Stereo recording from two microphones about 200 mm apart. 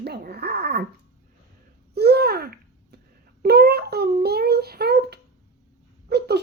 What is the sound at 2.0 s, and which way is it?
Babbling, 50° right (ahead or behind).